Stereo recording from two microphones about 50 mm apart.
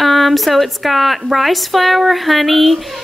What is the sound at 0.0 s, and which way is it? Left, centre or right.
A woman's voice, centre.